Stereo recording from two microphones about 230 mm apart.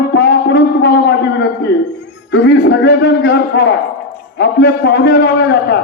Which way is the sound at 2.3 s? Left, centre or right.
Left.